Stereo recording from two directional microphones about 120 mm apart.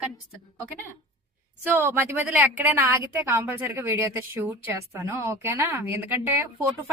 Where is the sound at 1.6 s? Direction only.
20° right (ahead or behind).